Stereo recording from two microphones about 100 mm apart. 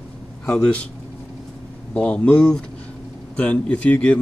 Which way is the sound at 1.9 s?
10° left (ahead or behind).